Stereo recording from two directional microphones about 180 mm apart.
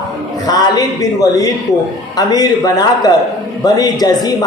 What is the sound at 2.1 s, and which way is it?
A man's voice, 20° left (ahead or behind).